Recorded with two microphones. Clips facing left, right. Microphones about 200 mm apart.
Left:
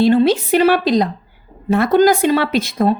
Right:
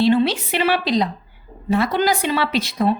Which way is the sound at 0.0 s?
45° left (ahead or behind).